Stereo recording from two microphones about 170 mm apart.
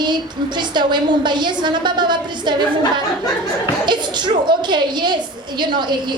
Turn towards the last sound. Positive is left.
turn(degrees=-25)  # may be behind; listen again after turning